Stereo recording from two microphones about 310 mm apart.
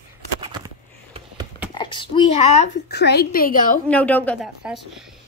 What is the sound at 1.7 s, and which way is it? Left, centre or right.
Speech, centre.